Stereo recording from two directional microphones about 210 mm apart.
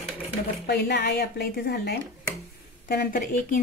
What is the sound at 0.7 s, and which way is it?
Speech, 50° left (ahead or behind).